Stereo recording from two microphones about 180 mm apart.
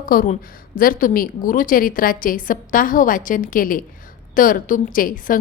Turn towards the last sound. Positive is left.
turn(degrees=50)  # may be behind; listen again after turning